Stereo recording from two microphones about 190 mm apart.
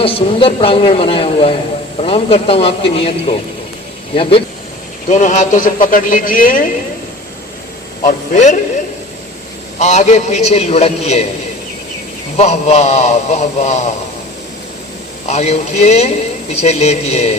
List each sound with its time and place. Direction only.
0.0 s a woman's voice: 30° left (ahead or behind)
4.1 s a woman's voice: 30° left (ahead or behind)
5.0 s a man's voice: 40° left (ahead or behind)
8.0 s speech: 40° left (ahead or behind)
9.7 s speech: 40° left (ahead or behind)
12.4 s speech: 35° left (ahead or behind)
15.3 s speech: 35° left (ahead or behind)